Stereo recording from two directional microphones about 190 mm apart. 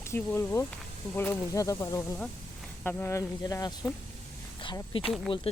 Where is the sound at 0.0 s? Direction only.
15° left (ahead or behind).